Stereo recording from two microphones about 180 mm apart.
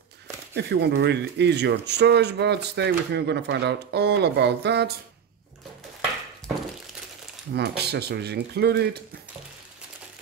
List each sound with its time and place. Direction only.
0.6 s speech: 70° right (ahead or behind)
7.5 s speech: 65° right (ahead or behind)